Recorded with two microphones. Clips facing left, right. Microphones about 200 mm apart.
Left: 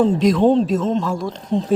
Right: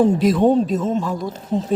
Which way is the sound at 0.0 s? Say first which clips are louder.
Even; 5° right (ahead or behind).